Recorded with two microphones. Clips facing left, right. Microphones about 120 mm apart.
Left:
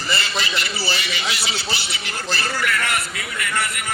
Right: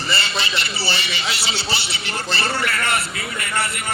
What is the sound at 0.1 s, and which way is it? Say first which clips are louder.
A man's voice: even; 30° right (ahead or behind).